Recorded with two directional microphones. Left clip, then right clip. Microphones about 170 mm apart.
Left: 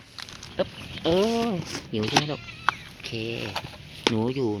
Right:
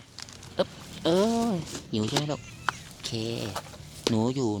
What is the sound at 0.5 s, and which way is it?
Speech, 15° right (ahead or behind).